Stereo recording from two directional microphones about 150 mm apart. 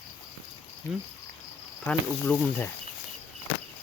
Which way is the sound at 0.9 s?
Centre (ahead or behind).